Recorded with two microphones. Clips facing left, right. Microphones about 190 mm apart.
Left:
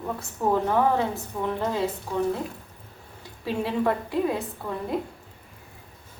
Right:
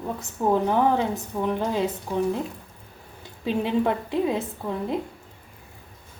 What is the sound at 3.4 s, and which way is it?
A woman's voice, 20° right (ahead or behind).